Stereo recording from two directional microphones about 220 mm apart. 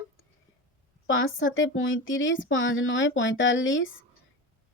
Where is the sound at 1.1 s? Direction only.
60° left (ahead or behind).